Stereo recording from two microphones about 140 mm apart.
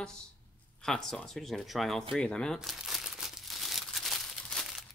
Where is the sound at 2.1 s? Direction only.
5° left (ahead or behind).